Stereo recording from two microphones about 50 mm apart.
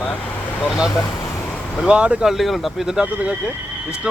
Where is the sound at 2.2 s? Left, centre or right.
Centre.